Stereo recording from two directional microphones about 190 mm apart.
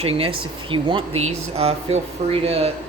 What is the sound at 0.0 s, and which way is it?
Speech, 30° right (ahead or behind).